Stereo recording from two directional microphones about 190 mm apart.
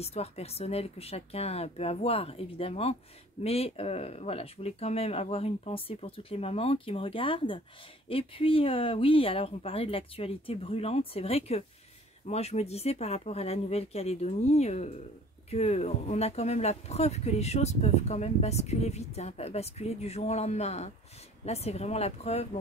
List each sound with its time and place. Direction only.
0.0 s speech: 35° left (ahead or behind)